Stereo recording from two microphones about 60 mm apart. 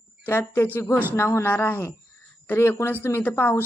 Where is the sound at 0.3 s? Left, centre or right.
Left.